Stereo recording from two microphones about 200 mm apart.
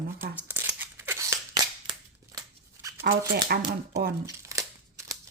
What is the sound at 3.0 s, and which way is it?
Speech, 45° right (ahead or behind).